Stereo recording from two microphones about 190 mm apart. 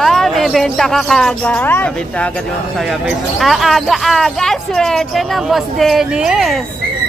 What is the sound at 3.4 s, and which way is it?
Speech, centre (ahead or behind).